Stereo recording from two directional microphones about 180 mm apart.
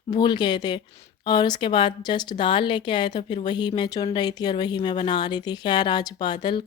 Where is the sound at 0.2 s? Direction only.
25° left (ahead or behind).